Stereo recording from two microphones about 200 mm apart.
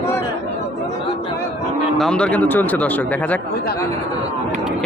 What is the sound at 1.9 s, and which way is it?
Speech, 5° left (ahead or behind).